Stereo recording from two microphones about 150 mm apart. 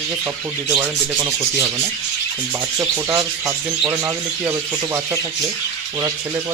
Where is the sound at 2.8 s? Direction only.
20° right (ahead or behind).